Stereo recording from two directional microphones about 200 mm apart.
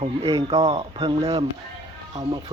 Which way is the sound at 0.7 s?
30° right (ahead or behind).